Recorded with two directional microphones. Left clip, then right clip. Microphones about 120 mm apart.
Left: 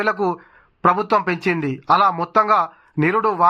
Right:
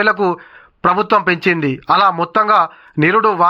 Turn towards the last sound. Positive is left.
turn(degrees=-15)  # may be behind; listen again after turning